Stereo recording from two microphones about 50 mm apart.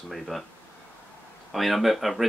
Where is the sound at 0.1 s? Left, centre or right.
Centre.